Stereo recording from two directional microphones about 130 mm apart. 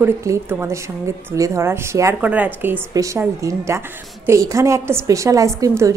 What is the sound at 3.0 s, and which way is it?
A woman's voice, 25° right (ahead or behind).